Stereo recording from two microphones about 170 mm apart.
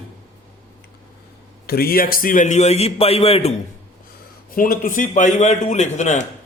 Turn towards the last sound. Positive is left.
turn(degrees=45)  # may be behind; listen again after turning